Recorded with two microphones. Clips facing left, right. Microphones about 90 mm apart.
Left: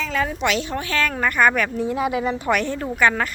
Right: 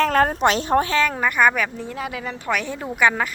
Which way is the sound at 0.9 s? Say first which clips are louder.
Right 2 dB; 20° right (ahead or behind).